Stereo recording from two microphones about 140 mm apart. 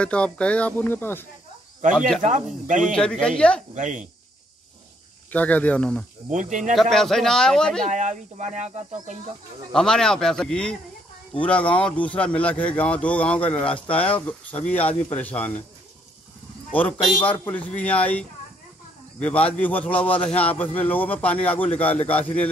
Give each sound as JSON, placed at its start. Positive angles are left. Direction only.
{"t": 0.0, "sound": "speech", "side_deg": 10}
{"t": 2.0, "sound": "a man's voice", "side_deg": 5}
{"t": 2.2, "sound": "speech", "side_deg": -65}
{"t": 2.8, "sound": "speech", "side_deg": 5}
{"t": 3.7, "sound": "speech", "side_deg": -65}
{"t": 5.3, "sound": "speech", "side_deg": 10}
{"t": 6.3, "sound": "speech", "side_deg": -65}
{"t": 6.7, "sound": "a man's voice", "side_deg": 0}
{"t": 7.9, "sound": "speech", "side_deg": -60}
{"t": 9.7, "sound": "a man's voice", "side_deg": 5}
{"t": 17.3, "sound": "speech", "side_deg": 10}